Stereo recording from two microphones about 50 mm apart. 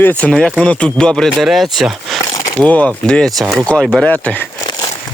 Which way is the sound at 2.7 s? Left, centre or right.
Left.